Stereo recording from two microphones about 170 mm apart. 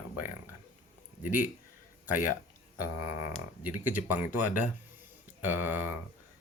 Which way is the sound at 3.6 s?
50° left (ahead or behind).